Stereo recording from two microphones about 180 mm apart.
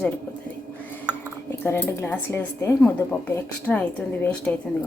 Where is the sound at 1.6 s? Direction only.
15° left (ahead or behind).